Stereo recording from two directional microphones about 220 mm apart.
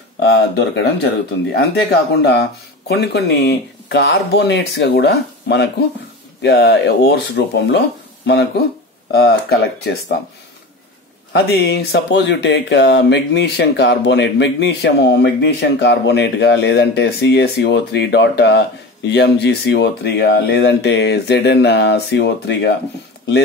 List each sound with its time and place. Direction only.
0.2 s speech: 50° left (ahead or behind)
9.1 s speech: 45° left (ahead or behind)
11.3 s speech: 50° left (ahead or behind)